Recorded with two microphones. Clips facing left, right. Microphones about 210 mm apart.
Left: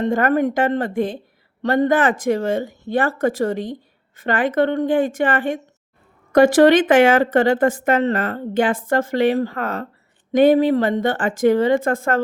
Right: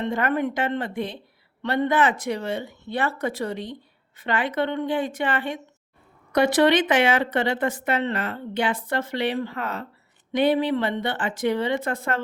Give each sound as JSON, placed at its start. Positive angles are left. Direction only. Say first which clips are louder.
{"t": 0.0, "sound": "speech", "louder": "left 6 dB", "side_deg": 45}